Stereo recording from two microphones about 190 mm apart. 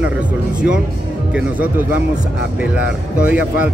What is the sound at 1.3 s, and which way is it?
Speech, 10° right (ahead or behind).